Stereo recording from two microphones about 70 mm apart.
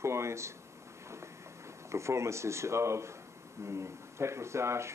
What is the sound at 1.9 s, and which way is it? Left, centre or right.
Speech, right.